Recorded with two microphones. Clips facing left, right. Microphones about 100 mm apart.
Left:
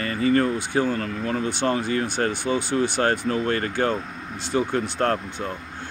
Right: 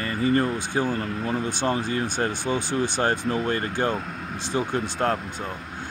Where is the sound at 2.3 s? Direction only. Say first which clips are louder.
Left 2 dB; 20° left (ahead or behind).